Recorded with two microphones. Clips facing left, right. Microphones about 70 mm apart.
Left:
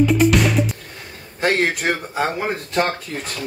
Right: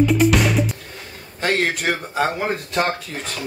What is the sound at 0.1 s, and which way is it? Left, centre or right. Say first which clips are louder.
Music: left 1 dB; centre.